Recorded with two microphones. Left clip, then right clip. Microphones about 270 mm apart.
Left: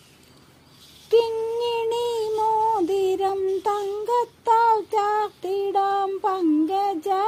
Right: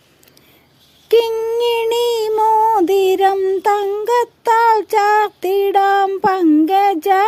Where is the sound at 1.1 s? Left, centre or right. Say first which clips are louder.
Right 6 dB; right.